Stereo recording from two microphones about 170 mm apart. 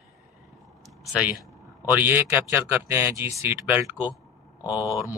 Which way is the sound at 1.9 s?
10° right (ahead or behind).